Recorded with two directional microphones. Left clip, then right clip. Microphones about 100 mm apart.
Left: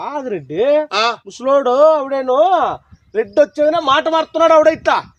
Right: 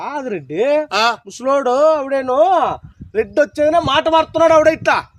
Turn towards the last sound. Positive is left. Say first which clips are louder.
# left 1 dB
turn(degrees=25)  # may be behind; listen again after turning